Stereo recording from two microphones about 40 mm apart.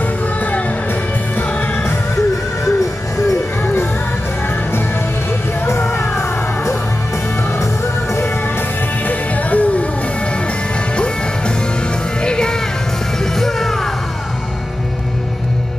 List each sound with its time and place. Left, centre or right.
5.9 s music: left
9.0 s music: left
12.2 s music: centre
13.2 s music: centre